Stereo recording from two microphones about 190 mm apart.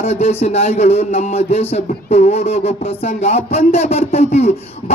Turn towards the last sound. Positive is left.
turn(degrees=35)  # may be behind; listen again after turning